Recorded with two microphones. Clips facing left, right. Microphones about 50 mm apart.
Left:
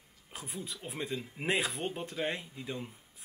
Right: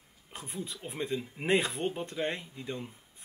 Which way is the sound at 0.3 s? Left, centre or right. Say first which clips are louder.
Right 2 dB; centre.